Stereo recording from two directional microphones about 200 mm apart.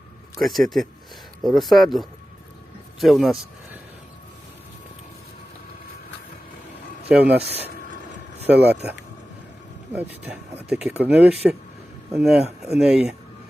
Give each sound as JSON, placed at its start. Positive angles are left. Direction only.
{"t": 0.3, "sound": "speech", "side_deg": 0}
{"t": 7.1, "sound": "speech", "side_deg": -5}
{"t": 7.5, "sound": "a sound", "side_deg": 30}
{"t": 8.4, "sound": "speech", "side_deg": -10}